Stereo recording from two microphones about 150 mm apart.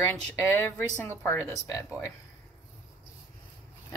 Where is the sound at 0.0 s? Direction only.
15° left (ahead or behind).